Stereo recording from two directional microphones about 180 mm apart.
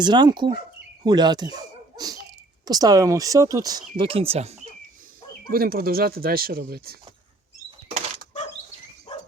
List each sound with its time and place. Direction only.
0.0 s speech: 25° right (ahead or behind)
2.0 s sneeze: 20° right (ahead or behind)
2.6 s speech: 20° right (ahead or behind)
5.5 s speech: 55° right (ahead or behind)
9.1 s dog: 35° left (ahead or behind)